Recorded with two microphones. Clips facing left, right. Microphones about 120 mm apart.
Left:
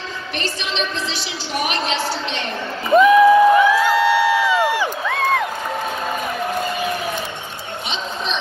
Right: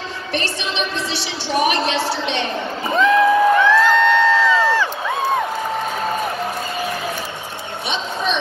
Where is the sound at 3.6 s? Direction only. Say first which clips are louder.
Right 1 dB; 10° left (ahead or behind).